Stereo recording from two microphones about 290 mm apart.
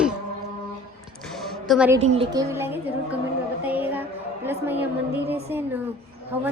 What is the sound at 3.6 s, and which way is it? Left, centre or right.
Music, centre.